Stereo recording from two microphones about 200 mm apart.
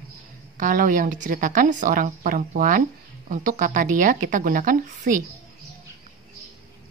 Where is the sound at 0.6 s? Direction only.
40° right (ahead or behind).